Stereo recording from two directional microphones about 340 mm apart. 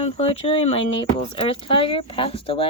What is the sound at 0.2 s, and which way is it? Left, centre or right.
Speech, centre.